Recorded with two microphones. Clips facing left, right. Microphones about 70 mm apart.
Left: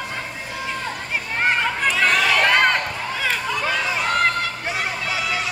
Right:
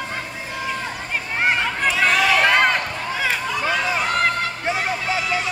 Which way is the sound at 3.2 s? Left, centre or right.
Centre.